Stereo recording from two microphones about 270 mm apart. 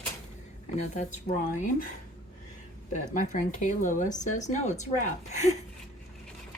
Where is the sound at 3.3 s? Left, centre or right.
Left.